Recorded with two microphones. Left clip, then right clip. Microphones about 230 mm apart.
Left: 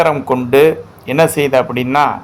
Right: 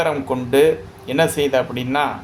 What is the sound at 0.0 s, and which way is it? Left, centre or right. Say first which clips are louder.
Speech: left 7 dB; left.